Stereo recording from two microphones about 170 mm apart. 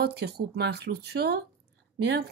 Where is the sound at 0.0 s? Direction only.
70° right (ahead or behind).